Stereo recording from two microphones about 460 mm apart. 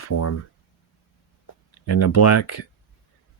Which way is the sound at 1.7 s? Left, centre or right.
Left.